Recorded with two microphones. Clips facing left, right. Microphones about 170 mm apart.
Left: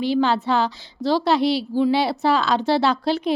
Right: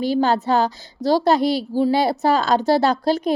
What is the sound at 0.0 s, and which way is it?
A woman's voice, 40° right (ahead or behind).